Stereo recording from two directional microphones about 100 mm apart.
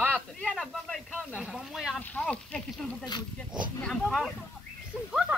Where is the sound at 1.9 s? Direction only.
10° left (ahead or behind).